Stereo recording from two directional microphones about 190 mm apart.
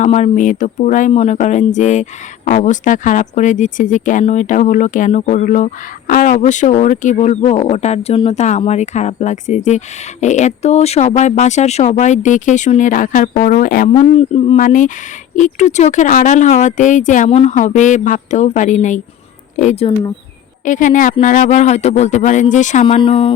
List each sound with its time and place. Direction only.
0.0 s speech: 40° left (ahead or behind)
13.9 s speech: 35° left (ahead or behind)